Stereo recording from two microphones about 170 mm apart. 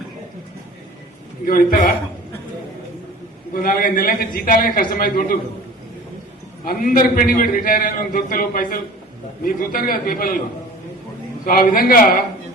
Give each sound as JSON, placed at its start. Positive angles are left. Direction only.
{"t": 1.5, "sound": "a man's voice", "side_deg": 55}
{"t": 3.5, "sound": "a man's voice", "side_deg": 55}
{"t": 6.7, "sound": "a man's voice", "side_deg": 55}
{"t": 11.4, "sound": "a man's voice", "side_deg": 55}